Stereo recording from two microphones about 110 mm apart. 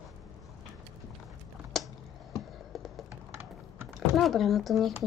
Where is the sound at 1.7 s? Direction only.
5° left (ahead or behind).